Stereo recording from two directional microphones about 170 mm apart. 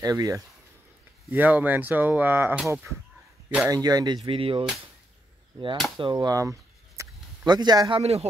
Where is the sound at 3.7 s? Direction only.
20° right (ahead or behind).